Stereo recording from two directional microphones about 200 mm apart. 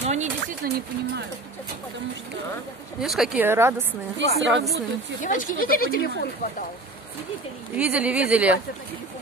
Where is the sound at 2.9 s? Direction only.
Centre (ahead or behind).